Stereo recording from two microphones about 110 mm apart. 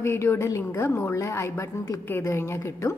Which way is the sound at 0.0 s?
25° left (ahead or behind).